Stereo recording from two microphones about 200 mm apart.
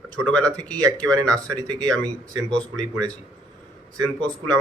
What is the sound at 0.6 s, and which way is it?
Speech, 20° right (ahead or behind).